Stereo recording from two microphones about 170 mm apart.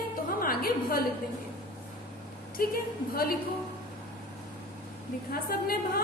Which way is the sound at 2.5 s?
60° left (ahead or behind).